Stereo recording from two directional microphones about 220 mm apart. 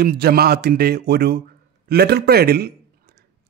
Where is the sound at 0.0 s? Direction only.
45° right (ahead or behind).